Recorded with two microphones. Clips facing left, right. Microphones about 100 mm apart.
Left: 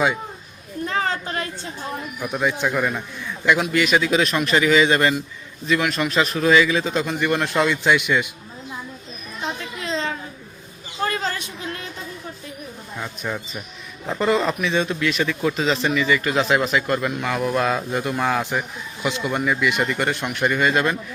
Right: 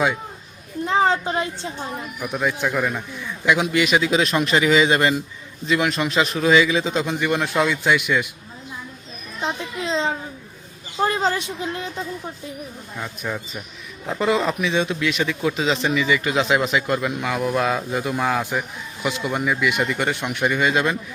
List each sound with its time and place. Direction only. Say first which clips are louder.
0.9 s a sound: right 6 dB; 20° right (ahead or behind)
2.2 s a man's voice: left 1 dB; centre (ahead or behind)
9.4 s children playing: right 3 dB; 20° right (ahead or behind)
11.0 s a sound: right 4 dB; 25° right (ahead or behind)
13.0 s speech: even; centre (ahead or behind)
14.1 s speech: even; 10° right (ahead or behind)